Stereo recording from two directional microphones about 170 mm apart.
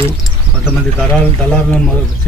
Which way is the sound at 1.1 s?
10° left (ahead or behind).